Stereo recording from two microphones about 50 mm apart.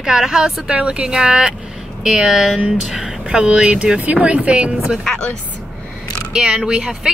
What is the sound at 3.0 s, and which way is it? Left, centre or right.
Speech, centre.